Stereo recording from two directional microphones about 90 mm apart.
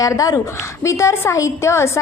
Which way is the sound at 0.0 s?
40° left (ahead or behind).